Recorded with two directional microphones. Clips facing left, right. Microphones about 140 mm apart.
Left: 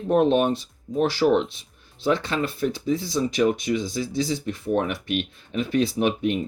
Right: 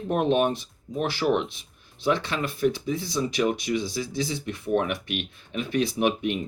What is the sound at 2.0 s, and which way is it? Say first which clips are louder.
Speech: left 2 dB; 40° left (ahead or behind).